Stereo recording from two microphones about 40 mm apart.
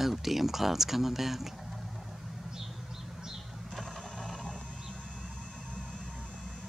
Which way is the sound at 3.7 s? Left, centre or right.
Centre.